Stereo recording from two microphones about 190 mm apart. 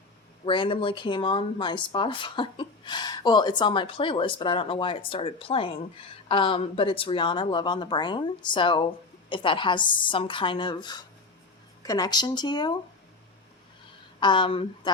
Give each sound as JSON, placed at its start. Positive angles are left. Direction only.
{"t": 0.4, "sound": "speech", "side_deg": 25}
{"t": 14.2, "sound": "speech", "side_deg": 25}